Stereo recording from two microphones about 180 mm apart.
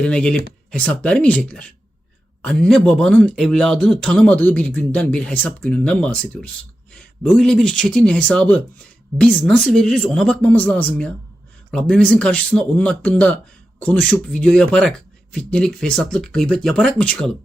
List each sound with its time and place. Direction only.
0.0 s speech: 5° left (ahead or behind)